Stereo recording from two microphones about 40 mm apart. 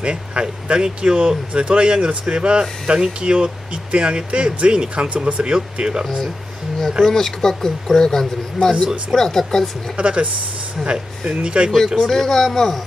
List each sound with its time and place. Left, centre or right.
0.0 s speech: right
7.1 s speech: centre
9.9 s speech: right
12.0 s speech: centre